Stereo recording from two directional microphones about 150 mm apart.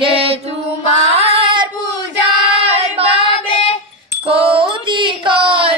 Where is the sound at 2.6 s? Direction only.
40° right (ahead or behind).